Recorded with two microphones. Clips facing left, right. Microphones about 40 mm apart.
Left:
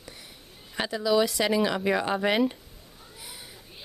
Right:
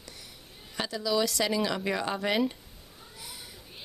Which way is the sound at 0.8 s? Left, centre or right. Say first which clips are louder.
Left 4 dB; left.